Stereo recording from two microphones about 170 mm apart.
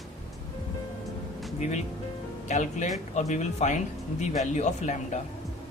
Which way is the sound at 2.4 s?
45° left (ahead or behind).